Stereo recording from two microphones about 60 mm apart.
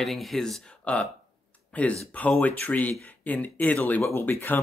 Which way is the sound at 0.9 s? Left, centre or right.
Left.